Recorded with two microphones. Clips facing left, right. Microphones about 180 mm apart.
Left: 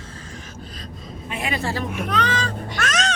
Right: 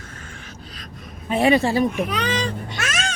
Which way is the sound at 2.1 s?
15° right (ahead or behind).